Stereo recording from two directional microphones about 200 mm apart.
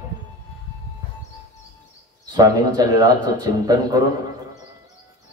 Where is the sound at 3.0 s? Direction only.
20° right (ahead or behind).